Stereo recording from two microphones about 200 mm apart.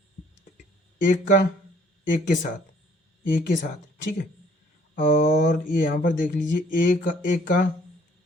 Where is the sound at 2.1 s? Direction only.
40° left (ahead or behind).